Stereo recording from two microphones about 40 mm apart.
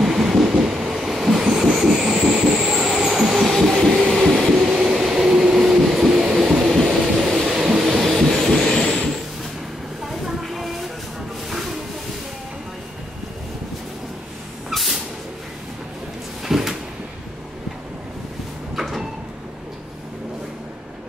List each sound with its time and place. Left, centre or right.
0.0 s train: centre
4.1 s heart murmur: centre
4.6 s train: right; by 8.6 s centre
10.2 s a sound: centre
14.7 s vehicle: centre
16.4 s cupboard open or close: centre
18.8 s sliding door: centre